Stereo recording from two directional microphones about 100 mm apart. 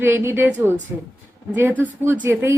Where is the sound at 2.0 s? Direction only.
25° right (ahead or behind).